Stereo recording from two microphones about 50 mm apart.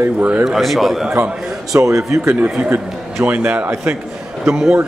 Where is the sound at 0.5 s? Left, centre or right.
Centre.